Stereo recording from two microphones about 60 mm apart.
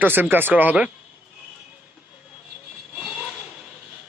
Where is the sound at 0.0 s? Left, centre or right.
Right.